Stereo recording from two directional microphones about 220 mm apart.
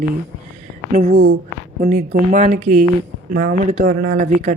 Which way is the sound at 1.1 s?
45° right (ahead or behind).